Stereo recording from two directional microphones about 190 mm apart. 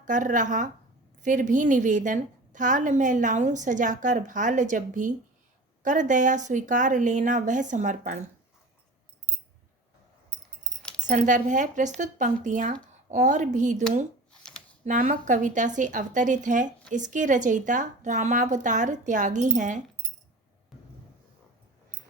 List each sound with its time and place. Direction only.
0.0 s a woman's voice: 45° right (ahead or behind)
11.0 s a woman's voice: 40° right (ahead or behind)
14.8 s a woman's voice: 40° right (ahead or behind)